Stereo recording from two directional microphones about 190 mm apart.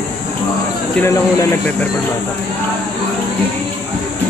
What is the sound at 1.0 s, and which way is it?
Speech, 15° left (ahead or behind).